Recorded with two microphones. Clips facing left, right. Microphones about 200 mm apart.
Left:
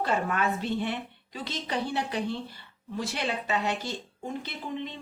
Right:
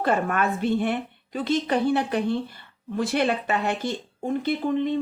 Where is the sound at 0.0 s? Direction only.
55° right (ahead or behind).